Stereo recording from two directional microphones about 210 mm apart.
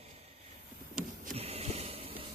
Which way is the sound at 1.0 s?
35° right (ahead or behind).